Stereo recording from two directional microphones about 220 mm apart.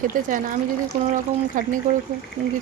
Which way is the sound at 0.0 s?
35° right (ahead or behind).